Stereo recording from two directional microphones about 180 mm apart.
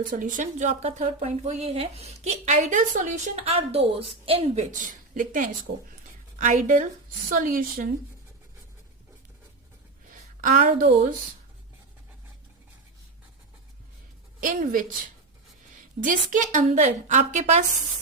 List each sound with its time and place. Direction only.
0.0 s speech: 50° right (ahead or behind)
10.1 s a sound: 45° right (ahead or behind)
14.4 s speech: 45° right (ahead or behind)
16.0 s speech: 45° right (ahead or behind)